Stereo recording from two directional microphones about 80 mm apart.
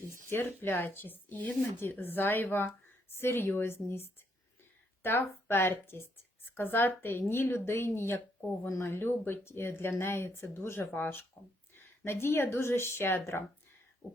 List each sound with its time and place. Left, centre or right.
0.3 s speech: left